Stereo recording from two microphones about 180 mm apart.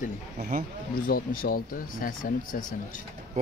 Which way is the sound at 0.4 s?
50° right (ahead or behind).